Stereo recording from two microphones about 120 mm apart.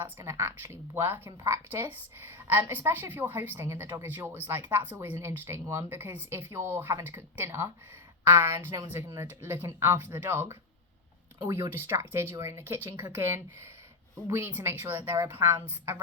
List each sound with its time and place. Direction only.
0.0 s a woman's voice: 20° right (ahead or behind)